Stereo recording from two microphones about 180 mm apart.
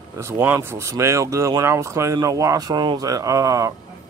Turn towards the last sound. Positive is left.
turn(degrees=-20)  # may be behind; listen again after turning